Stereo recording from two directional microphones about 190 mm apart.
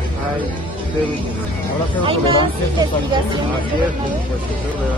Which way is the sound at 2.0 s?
30° right (ahead or behind).